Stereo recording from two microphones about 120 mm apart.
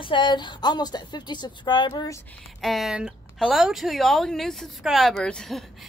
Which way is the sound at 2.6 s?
Centre (ahead or behind).